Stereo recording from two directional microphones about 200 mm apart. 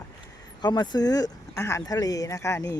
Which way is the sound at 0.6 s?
20° left (ahead or behind).